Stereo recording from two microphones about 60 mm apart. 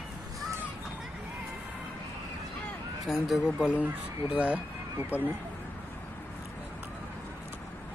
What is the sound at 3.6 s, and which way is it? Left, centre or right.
Speech, right.